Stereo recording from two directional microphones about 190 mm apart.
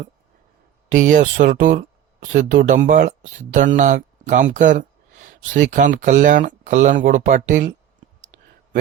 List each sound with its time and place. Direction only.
0.9 s speech: 45° right (ahead or behind)